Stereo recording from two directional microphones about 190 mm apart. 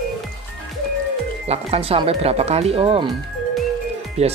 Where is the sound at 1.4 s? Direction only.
30° right (ahead or behind).